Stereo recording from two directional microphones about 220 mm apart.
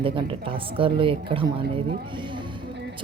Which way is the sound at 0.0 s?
25° right (ahead or behind).